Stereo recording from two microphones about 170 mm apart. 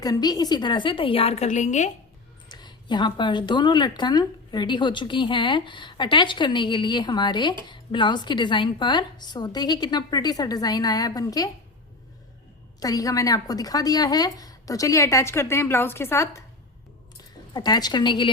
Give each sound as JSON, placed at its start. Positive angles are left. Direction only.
{"t": 0.0, "sound": "speech", "side_deg": 25}
{"t": 2.5, "sound": "speech", "side_deg": 25}
{"t": 12.8, "sound": "speech", "side_deg": 20}
{"t": 17.5, "sound": "speech", "side_deg": 25}